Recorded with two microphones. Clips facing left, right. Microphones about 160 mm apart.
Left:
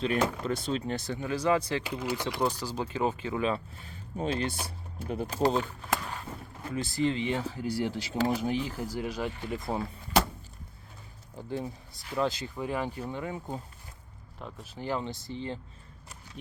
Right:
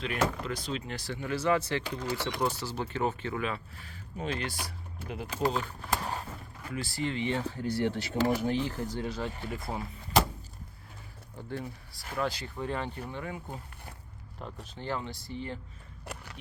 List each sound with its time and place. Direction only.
0.0 s speech: 30° left (ahead or behind)
0.9 s speech: 20° left (ahead or behind)
3.4 s speech: 30° left (ahead or behind)
5.0 s speech: 40° left (ahead or behind)
6.6 s speech: 25° left (ahead or behind)
11.4 s speech: 20° left (ahead or behind)
14.3 s speech: 5° left (ahead or behind)
14.9 s speech: 20° left (ahead or behind)
16.0 s a sound: 70° right (ahead or behind)